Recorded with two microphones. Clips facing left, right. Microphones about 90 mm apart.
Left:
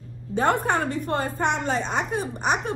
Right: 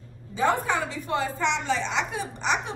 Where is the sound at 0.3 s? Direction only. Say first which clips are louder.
Left 2 dB; 55° left (ahead or behind).